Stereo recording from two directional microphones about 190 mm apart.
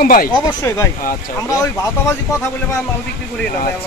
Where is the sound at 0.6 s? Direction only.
15° left (ahead or behind).